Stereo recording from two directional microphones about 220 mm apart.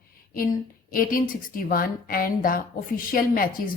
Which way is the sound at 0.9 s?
40° left (ahead or behind).